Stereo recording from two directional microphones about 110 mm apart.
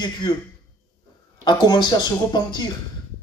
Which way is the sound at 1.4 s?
40° left (ahead or behind).